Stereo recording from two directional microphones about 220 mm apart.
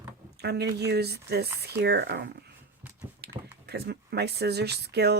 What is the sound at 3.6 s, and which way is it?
Speech, 50° right (ahead or behind).